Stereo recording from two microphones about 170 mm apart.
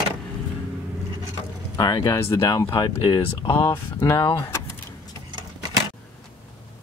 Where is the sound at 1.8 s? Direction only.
25° left (ahead or behind).